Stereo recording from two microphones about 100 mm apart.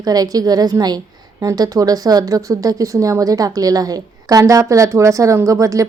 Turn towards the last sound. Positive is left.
turn(degrees=-35)  # may be behind; listen again after turning